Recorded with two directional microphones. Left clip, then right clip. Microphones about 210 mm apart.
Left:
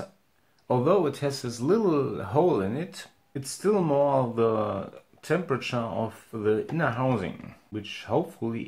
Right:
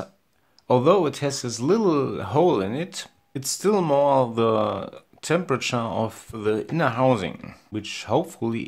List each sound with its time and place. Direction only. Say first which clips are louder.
0.7 s speech: right 5 dB; 35° right (ahead or behind)